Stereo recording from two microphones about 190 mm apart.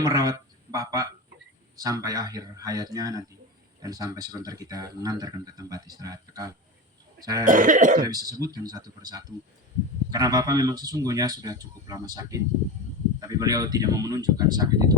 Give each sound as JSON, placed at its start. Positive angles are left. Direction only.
{"t": 0.0, "sound": "a man's voice", "side_deg": -20}
{"t": 7.4, "sound": "cough", "side_deg": -45}
{"t": 8.0, "sound": "speech", "side_deg": -20}